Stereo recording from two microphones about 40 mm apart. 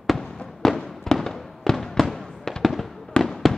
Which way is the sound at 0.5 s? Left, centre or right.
Centre.